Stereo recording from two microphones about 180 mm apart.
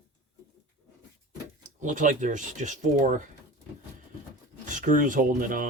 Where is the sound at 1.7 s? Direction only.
45° right (ahead or behind).